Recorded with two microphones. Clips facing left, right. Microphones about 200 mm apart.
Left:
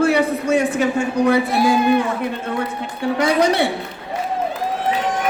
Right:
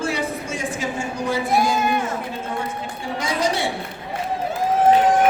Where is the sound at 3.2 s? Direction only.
60° left (ahead or behind).